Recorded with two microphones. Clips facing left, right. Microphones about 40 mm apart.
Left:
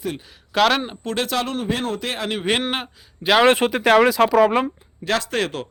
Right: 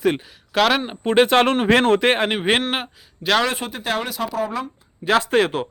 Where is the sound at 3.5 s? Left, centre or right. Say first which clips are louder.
Left 9 dB; left.